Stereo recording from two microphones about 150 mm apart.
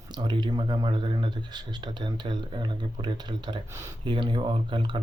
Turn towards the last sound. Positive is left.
turn(degrees=-35)  # may be behind; listen again after turning